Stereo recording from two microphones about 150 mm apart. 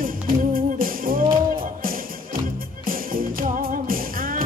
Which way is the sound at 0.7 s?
70° right (ahead or behind).